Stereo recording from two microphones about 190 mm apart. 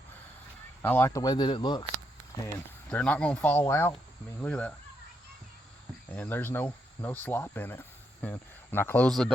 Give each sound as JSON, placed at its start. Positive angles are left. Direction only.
{"t": 0.8, "sound": "speech", "side_deg": 10}
{"t": 2.9, "sound": "speech", "side_deg": 5}
{"t": 6.1, "sound": "speech", "side_deg": 10}